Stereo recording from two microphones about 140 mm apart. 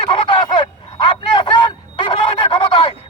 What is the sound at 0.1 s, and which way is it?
Vehicle, 35° left (ahead or behind).